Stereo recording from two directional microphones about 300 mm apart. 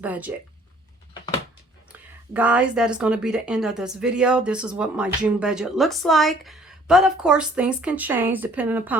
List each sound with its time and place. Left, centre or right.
0.0 s a woman's voice: centre
1.9 s a woman's voice: centre